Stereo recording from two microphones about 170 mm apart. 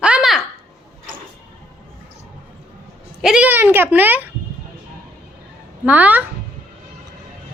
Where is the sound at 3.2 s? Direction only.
5° right (ahead or behind).